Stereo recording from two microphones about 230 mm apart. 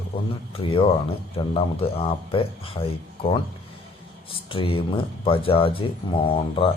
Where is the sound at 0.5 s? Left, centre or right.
Left.